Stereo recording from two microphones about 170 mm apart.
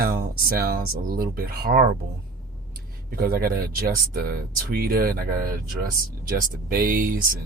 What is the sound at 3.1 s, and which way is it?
Speech, 65° right (ahead or behind).